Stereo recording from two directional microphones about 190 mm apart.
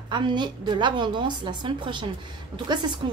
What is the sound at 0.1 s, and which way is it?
Speech, 25° right (ahead or behind).